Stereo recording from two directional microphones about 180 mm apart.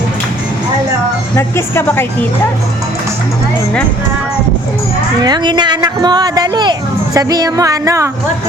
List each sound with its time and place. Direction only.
1.4 s speech: 15° left (ahead or behind)
5.2 s speech: 25° right (ahead or behind)